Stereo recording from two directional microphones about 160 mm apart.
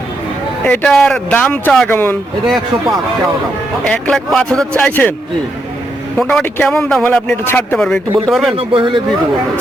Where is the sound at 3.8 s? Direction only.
5° left (ahead or behind).